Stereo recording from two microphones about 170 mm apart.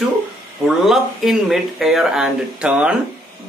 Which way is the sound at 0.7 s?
Centre (ahead or behind).